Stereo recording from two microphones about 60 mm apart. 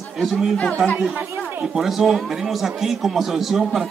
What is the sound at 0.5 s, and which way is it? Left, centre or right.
Speech, centre.